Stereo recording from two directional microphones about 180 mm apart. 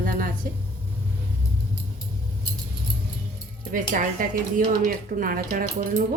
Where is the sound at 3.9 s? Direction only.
50° right (ahead or behind).